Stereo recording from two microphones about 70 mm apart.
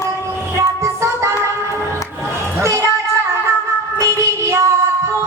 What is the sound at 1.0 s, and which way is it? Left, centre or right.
Music, right.